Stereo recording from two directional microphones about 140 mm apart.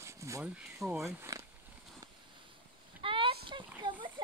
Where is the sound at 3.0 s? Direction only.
40° right (ahead or behind).